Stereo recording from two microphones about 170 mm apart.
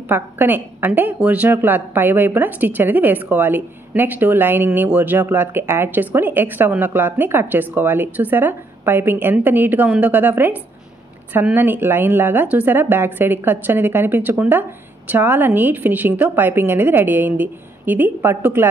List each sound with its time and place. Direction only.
0.1 s a woman's voice: 10° right (ahead or behind)